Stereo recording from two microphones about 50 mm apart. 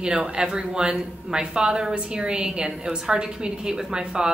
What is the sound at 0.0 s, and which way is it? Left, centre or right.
A woman's voice, centre.